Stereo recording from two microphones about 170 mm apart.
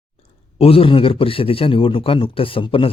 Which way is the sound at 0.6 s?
35° left (ahead or behind).